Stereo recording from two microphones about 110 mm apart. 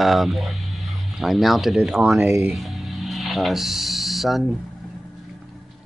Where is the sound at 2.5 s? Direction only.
Centre (ahead or behind).